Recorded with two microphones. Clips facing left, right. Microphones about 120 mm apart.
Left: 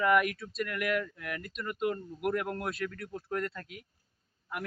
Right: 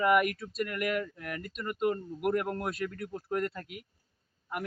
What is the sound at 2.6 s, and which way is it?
Speech, 5° right (ahead or behind).